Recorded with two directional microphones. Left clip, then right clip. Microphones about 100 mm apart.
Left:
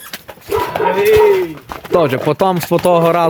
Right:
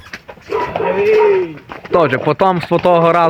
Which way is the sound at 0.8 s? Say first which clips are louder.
Left 2 dB; 55° left (ahead or behind).